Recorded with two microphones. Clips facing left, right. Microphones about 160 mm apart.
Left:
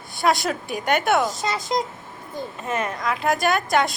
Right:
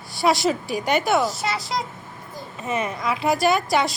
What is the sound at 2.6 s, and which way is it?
A woman's voice, centre (ahead or behind).